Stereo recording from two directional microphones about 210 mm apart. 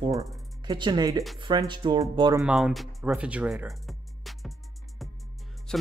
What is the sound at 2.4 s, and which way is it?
Speech, centre (ahead or behind).